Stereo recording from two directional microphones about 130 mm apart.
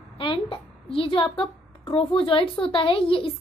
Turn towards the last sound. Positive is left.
turn(degrees=45)  # may be behind; listen again after turning